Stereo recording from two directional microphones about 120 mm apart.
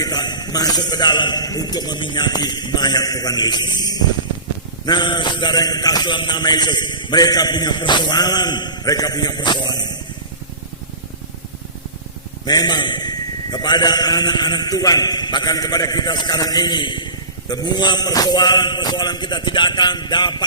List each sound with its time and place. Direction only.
0.0 s a man's voice: 35° left (ahead or behind)
12.5 s a man's voice: 35° left (ahead or behind)